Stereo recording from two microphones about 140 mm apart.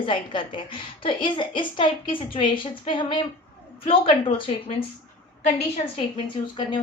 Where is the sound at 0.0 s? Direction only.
35° left (ahead or behind).